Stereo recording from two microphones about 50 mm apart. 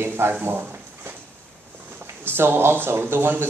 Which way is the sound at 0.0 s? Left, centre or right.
Right.